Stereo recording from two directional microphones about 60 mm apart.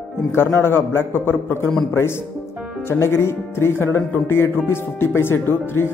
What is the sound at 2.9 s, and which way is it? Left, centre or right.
Speech, left.